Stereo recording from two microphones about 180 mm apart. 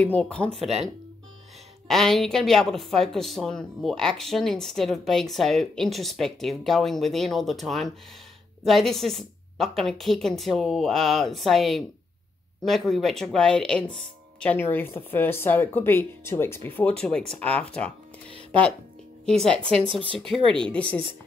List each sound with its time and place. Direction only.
0.0 s speech: 5° left (ahead or behind)
1.9 s speech: centre (ahead or behind)
19.2 s speech: 5° left (ahead or behind)
19.9 s speech: 30° right (ahead or behind)
20.5 s speech: 5° left (ahead or behind)